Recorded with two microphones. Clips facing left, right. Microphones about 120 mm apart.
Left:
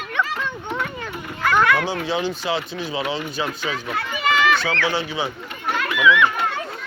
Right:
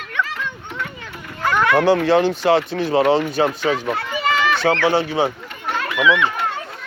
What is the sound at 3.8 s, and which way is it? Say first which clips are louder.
Run: right 2 dB; 35° right (ahead or behind).